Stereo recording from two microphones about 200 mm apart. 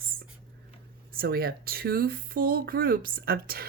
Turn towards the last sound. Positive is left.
turn(degrees=-45)  # may be behind; listen again after turning